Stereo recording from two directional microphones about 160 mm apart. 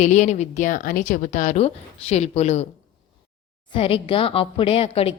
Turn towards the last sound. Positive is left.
turn(degrees=35)  # may be behind; listen again after turning